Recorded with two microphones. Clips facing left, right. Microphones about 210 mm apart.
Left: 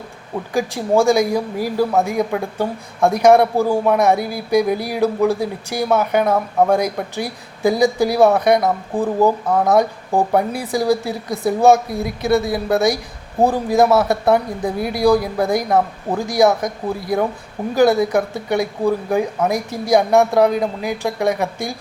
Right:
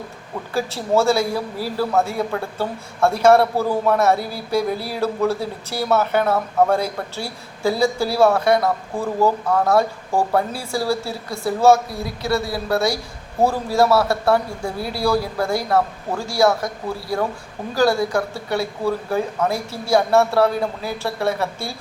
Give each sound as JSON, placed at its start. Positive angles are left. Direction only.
{"t": 0.5, "sound": "a man's voice", "side_deg": 15}